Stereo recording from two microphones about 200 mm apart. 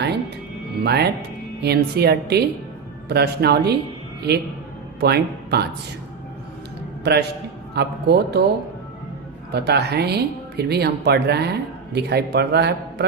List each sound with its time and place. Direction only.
0.8 s speech: 55° right (ahead or behind)
4.9 s speech: 55° right (ahead or behind)
7.0 s a man's voice: 55° right (ahead or behind)
9.5 s speech: 55° right (ahead or behind)